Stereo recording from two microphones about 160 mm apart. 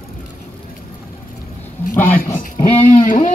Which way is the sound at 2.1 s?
60° left (ahead or behind).